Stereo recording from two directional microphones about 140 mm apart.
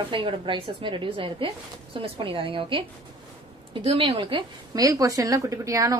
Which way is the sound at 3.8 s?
45° right (ahead or behind).